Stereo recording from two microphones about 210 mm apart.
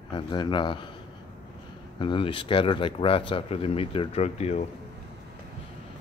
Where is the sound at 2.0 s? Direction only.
25° left (ahead or behind).